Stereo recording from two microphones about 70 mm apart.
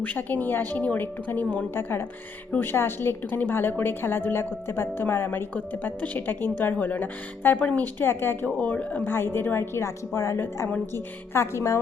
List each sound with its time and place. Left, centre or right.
0.0 s a woman's voice: left
8.4 s a woman's voice: centre
9.0 s a woman's voice: left